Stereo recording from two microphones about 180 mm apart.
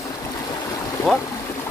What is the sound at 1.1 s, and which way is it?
Speech, centre (ahead or behind).